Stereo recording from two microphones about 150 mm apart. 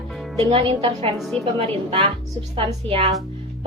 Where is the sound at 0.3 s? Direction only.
40° right (ahead or behind).